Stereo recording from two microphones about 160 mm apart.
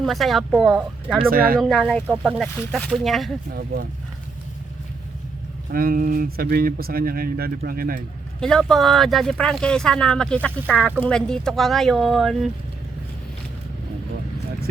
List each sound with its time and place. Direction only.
0.0 s speech: centre (ahead or behind)
1.3 s speech: 65° right (ahead or behind)
1.5 s speech: centre (ahead or behind)
2.0 s speech: 10° right (ahead or behind)
2.4 s speech: 5° left (ahead or behind)
3.5 s speech: 75° right (ahead or behind)
5.7 s speech: 65° right (ahead or behind)
8.4 s speech: 5° left (ahead or behind)